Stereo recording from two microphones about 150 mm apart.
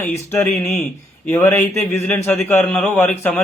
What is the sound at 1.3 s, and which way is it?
A man's voice, 15° left (ahead or behind).